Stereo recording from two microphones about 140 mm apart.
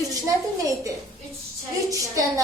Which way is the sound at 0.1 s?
25° right (ahead or behind).